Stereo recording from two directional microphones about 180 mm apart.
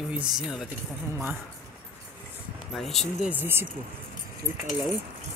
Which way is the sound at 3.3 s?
10° right (ahead or behind).